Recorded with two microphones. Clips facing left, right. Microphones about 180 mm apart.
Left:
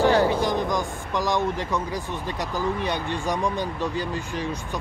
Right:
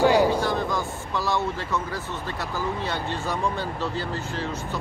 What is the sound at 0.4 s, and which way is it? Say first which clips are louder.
Speech: left 1 dB; 15° left (ahead or behind).